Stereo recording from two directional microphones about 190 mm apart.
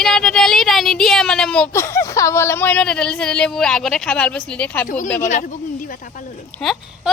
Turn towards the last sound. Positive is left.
turn(degrees=0)  # may be behind; listen again after turning